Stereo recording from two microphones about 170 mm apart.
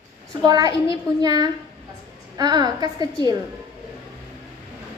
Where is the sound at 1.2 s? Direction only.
20° right (ahead or behind).